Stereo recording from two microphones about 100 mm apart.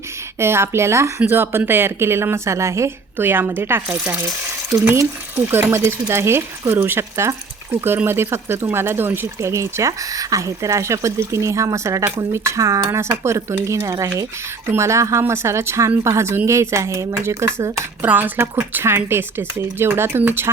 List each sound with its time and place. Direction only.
0.3 s speech: 25° right (ahead or behind)
5.5 s speech: 25° right (ahead or behind)
18.0 s speech: 20° right (ahead or behind)